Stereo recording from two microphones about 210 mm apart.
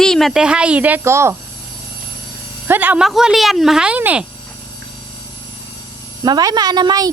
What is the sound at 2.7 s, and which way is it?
Speech, 5° right (ahead or behind).